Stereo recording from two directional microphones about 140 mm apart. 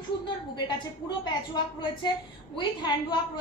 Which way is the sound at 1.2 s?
35° left (ahead or behind).